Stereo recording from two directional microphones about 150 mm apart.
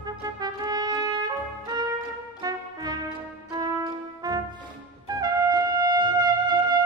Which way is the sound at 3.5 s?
25° right (ahead or behind).